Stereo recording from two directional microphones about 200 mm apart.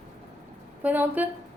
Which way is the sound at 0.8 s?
10° right (ahead or behind).